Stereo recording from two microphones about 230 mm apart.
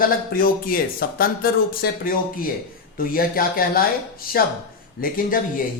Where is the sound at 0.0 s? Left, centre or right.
Left.